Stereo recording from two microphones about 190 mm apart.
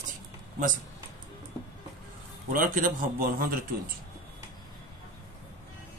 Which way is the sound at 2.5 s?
45° right (ahead or behind).